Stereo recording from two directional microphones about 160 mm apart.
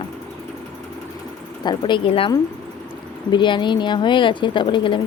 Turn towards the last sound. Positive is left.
turn(degrees=30)  # may be behind; listen again after turning